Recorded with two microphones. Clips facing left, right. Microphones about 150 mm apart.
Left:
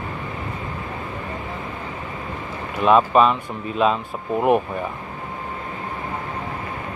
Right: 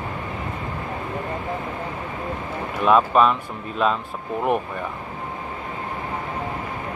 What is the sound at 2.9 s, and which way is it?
Speech, centre (ahead or behind).